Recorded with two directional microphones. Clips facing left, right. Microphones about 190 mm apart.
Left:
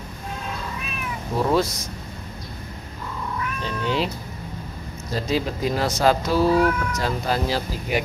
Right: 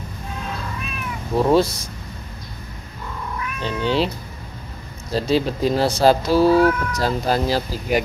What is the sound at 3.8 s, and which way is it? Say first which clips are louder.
Speech: right 4 dB; 30° right (ahead or behind).